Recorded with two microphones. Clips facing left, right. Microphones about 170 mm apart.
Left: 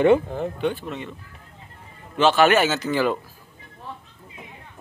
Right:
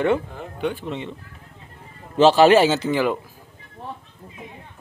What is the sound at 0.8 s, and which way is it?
Speech, 25° right (ahead or behind).